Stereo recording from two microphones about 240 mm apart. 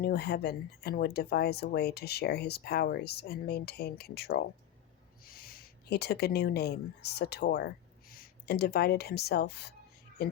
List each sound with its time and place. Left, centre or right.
0.0 s speech: left